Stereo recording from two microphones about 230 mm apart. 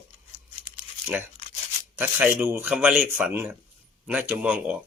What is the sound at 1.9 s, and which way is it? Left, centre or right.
Speech, centre.